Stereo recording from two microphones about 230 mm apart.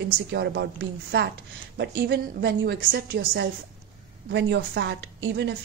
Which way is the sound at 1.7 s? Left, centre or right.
Right.